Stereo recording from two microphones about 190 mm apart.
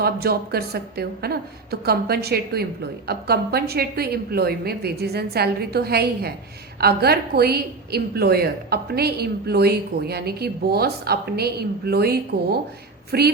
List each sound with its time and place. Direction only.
0.0 s a woman's voice: 55° right (ahead or behind)